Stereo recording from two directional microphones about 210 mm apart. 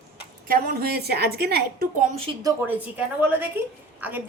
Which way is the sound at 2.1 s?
25° right (ahead or behind).